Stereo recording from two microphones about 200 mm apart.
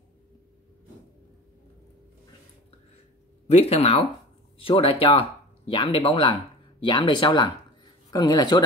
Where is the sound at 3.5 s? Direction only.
30° left (ahead or behind).